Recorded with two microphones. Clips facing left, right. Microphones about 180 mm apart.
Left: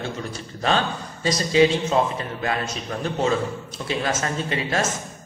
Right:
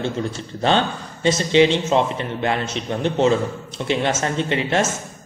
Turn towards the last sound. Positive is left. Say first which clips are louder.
# right 4 dB
turn(degrees=-25)  # may be behind; listen again after turning